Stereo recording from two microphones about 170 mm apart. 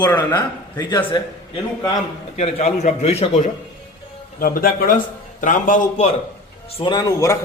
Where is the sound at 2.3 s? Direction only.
40° left (ahead or behind).